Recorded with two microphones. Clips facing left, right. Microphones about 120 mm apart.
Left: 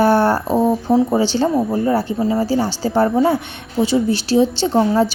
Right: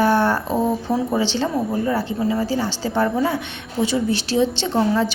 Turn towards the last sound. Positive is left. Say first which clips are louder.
# left 4 dB
turn(degrees=35)  # may be behind; listen again after turning